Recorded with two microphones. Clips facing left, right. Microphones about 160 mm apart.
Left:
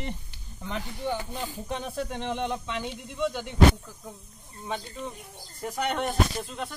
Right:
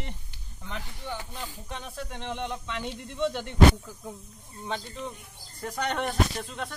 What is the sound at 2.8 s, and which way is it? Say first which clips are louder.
Speech: right 3 dB; centre (ahead or behind).